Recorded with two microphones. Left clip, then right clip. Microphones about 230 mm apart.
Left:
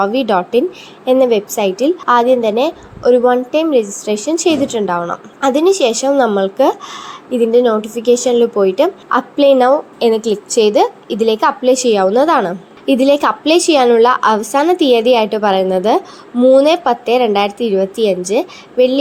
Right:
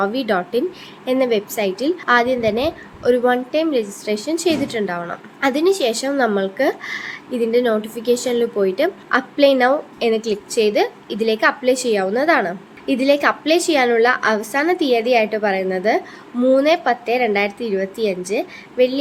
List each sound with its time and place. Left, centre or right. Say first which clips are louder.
0.0 s a woman's voice: left 6 dB; centre